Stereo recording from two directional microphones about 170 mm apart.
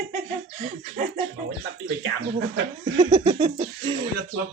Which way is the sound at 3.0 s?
25° right (ahead or behind).